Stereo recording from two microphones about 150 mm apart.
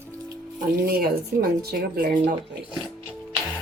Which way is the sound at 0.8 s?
90° right.